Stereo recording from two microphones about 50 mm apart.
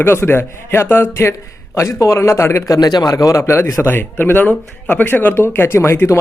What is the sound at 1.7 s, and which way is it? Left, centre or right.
Speech, left.